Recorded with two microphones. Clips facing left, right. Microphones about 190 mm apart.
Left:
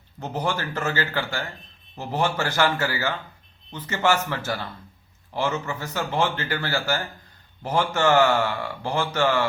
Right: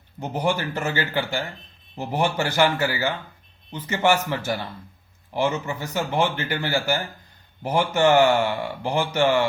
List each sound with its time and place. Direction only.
0.2 s speech: 15° right (ahead or behind)